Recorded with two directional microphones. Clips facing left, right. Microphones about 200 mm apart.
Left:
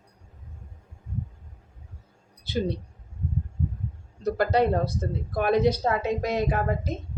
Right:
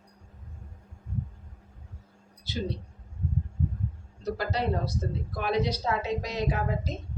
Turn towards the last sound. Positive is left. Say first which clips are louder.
# left 3 dB
turn(degrees=55)  # may be behind; listen again after turning